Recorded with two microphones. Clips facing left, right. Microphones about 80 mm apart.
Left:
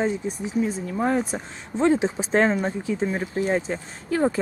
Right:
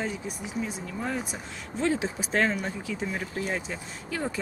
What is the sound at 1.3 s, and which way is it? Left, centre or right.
Speech, left.